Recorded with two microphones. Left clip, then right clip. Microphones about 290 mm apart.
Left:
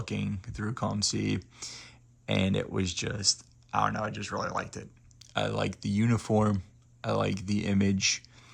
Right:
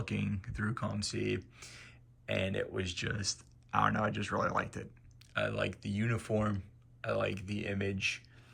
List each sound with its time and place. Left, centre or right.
0.0 s speech: centre